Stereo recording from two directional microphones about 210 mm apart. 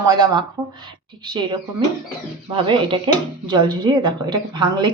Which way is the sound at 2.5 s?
25° right (ahead or behind).